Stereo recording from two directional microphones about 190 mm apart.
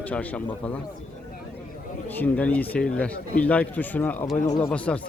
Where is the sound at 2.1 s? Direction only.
10° left (ahead or behind).